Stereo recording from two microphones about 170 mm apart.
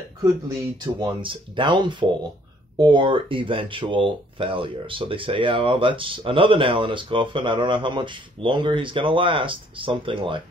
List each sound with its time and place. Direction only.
0.7 s speech: 25° right (ahead or behind)